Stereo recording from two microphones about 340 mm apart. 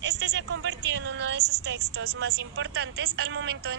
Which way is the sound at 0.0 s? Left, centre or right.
Right.